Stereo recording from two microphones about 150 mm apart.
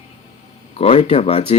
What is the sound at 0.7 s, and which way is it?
Speech, 40° left (ahead or behind).